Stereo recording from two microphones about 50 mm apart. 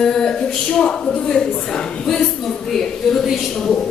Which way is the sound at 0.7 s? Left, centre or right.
Centre.